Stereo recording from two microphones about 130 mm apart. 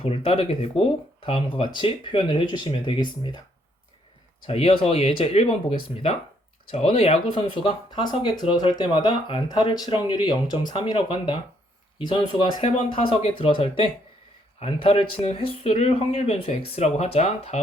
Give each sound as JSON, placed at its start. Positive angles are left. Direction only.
{"t": 0.0, "sound": "speech", "side_deg": 50}
{"t": 4.4, "sound": "speech", "side_deg": 45}